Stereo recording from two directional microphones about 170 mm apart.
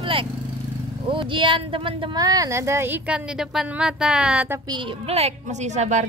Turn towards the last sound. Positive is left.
turn(degrees=-45)  # may be behind; listen again after turning